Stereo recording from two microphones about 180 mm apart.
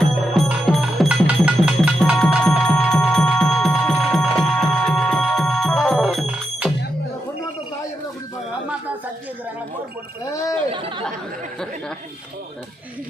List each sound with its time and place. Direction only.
0.0 s music: centre (ahead or behind)
10.7 s chatter: 30° right (ahead or behind)